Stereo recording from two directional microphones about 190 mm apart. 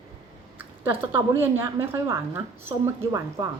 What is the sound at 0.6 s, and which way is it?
A woman's voice, 10° right (ahead or behind).